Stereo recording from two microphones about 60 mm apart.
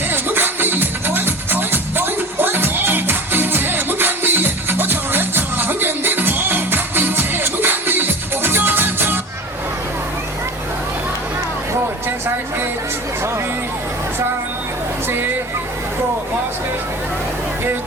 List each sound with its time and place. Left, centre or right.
0.1 s music: right